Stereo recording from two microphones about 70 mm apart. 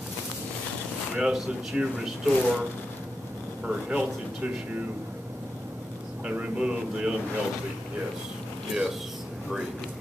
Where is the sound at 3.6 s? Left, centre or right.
Centre.